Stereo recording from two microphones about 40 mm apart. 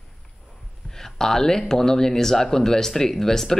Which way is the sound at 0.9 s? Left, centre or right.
Centre.